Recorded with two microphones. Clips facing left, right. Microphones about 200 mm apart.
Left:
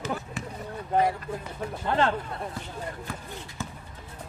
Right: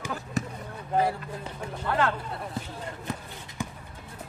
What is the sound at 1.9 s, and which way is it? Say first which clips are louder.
Speech: left 2 dB; 25° left (ahead or behind).